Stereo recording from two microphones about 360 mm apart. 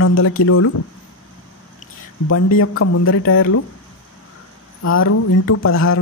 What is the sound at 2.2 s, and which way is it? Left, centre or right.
Speech, left.